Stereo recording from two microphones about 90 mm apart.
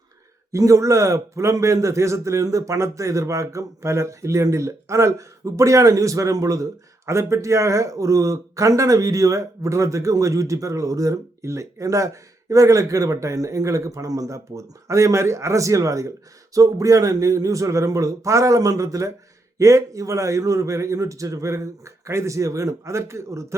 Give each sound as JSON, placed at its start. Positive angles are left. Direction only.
{"t": 0.5, "sound": "a man's voice", "side_deg": -35}